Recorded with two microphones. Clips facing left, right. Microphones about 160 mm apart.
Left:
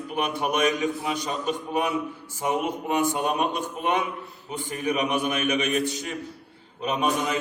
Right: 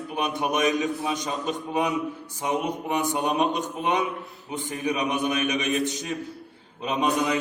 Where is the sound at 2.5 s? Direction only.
15° right (ahead or behind).